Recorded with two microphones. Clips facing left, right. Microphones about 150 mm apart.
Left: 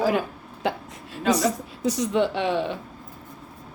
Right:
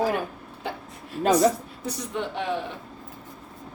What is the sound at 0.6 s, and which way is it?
Speech, 90° left.